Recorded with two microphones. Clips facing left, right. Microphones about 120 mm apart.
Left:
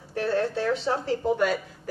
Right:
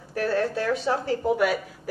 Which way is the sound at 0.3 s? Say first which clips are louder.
Even; 5° right (ahead or behind).